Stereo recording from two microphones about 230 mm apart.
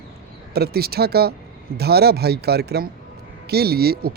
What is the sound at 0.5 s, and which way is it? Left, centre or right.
Speech, right.